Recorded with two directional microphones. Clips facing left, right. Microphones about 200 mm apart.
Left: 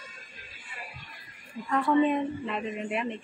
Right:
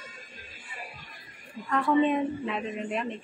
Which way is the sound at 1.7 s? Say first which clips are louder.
Even; centre (ahead or behind).